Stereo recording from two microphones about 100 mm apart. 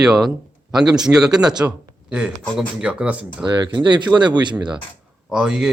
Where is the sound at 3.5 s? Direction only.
50° right (ahead or behind).